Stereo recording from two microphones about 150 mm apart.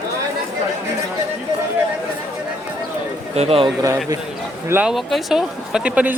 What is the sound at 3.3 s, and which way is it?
Speech, 40° right (ahead or behind).